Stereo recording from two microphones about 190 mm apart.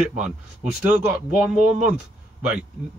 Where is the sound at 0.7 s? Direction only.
5° right (ahead or behind).